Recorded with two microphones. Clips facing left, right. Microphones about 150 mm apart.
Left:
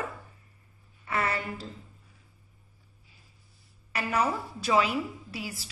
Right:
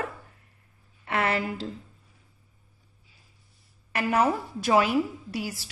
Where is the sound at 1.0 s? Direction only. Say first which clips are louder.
Right 4 dB; 70° right (ahead or behind).